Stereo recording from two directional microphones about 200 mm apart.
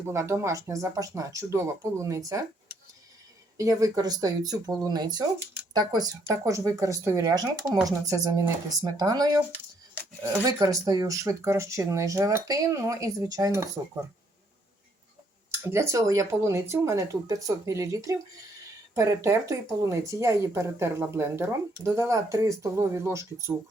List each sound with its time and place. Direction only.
0.1 s speech: 15° right (ahead or behind)
3.6 s speech: 15° right (ahead or behind)
10.4 s speech: 15° right (ahead or behind)
15.7 s speech: 15° right (ahead or behind)